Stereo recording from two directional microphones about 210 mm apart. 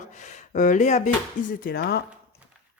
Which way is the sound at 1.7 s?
50° left (ahead or behind).